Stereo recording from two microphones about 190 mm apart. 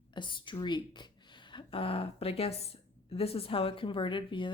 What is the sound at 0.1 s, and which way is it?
Speech, 25° left (ahead or behind).